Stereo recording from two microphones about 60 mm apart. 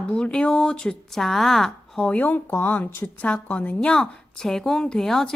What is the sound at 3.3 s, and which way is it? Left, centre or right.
Speech, left.